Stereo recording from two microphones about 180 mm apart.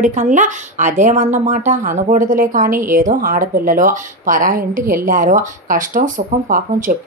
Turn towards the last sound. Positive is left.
turn(degrees=-50)  # may be behind; listen again after turning